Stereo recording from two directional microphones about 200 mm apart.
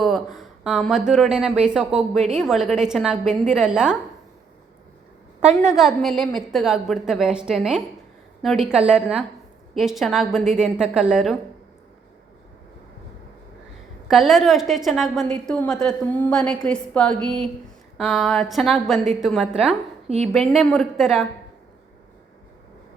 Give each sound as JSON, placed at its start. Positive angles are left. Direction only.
{"t": 0.0, "sound": "a woman's voice", "side_deg": 0}
{"t": 5.6, "sound": "a woman's voice", "side_deg": 0}
{"t": 14.1, "sound": "a woman's voice", "side_deg": 0}